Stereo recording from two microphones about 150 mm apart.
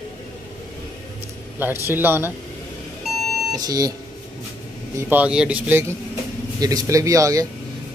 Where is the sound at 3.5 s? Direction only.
25° right (ahead or behind).